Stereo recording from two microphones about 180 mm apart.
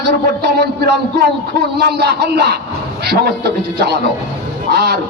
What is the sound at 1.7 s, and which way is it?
A man's voice, 65° right (ahead or behind).